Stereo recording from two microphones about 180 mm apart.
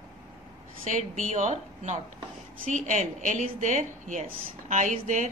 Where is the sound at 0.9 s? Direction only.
45° right (ahead or behind).